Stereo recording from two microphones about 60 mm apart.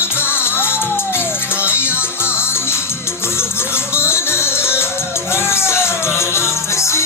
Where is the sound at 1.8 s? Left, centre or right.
Right.